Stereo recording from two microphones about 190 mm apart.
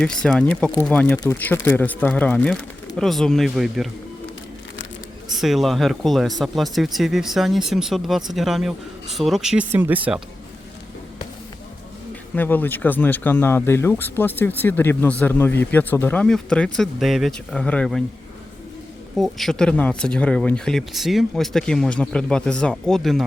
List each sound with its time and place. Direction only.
0.0 s speech: 5° left (ahead or behind)
5.4 s speech: centre (ahead or behind)
12.4 s speech: 10° left (ahead or behind)
19.1 s speech: centre (ahead or behind)